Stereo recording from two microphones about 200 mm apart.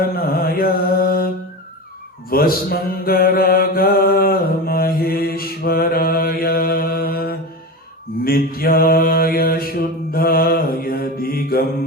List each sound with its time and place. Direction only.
0.0 s mantra: 50° left (ahead or behind)
2.3 s mantra: 50° left (ahead or behind)